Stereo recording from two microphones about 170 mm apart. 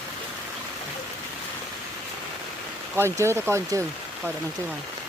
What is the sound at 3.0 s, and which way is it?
Speech, 15° right (ahead or behind).